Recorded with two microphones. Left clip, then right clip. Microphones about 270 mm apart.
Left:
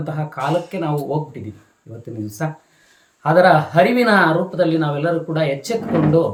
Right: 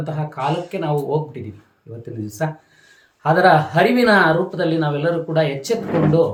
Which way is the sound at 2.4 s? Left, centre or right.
Centre.